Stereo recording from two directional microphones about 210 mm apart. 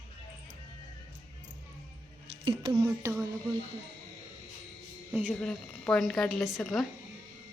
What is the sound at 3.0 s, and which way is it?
Speech, 10° right (ahead or behind).